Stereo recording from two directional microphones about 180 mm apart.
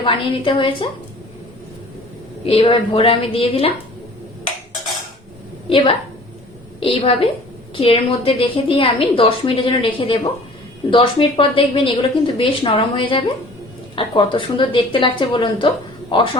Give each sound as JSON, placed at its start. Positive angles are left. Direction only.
{"t": 0.0, "sound": "a woman's voice", "side_deg": 30}
{"t": 2.4, "sound": "a woman's voice", "side_deg": 35}
{"t": 5.6, "sound": "a woman's voice", "side_deg": 30}